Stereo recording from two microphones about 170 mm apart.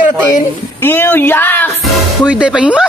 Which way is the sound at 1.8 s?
5° right (ahead or behind).